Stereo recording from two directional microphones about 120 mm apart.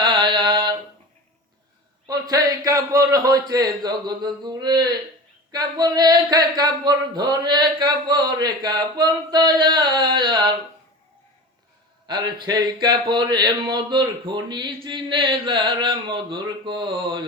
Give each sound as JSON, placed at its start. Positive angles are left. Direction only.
{"t": 0.0, "sound": "mantra", "side_deg": -40}
{"t": 2.0, "sound": "speech", "side_deg": -30}
{"t": 12.0, "sound": "speech", "side_deg": -40}